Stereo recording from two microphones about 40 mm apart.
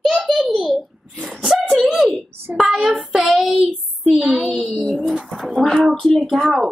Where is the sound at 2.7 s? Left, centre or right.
Right.